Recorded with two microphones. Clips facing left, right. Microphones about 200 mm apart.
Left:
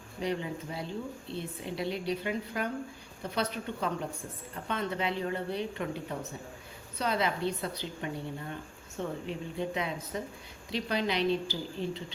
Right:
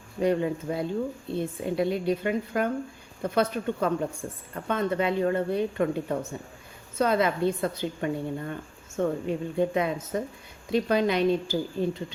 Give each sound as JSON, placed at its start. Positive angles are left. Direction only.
{"t": 0.2, "sound": "a woman's voice", "side_deg": -55}